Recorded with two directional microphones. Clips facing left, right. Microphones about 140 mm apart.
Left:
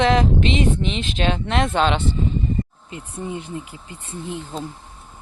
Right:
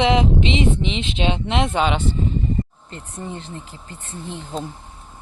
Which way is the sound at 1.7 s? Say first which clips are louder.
Left 2 dB; 10° right (ahead or behind).